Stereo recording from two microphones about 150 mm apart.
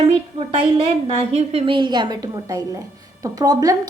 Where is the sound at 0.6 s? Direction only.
40° right (ahead or behind).